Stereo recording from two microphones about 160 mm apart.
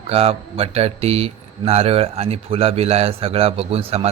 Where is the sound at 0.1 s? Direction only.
40° right (ahead or behind).